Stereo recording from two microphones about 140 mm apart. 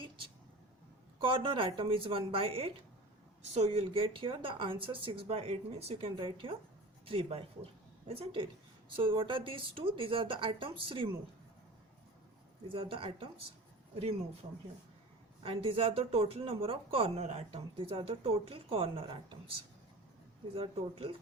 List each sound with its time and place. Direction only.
1.2 s speech: 35° right (ahead or behind)
12.6 s speech: 40° right (ahead or behind)
15.4 s speech: 40° right (ahead or behind)
20.6 s speech: 40° right (ahead or behind)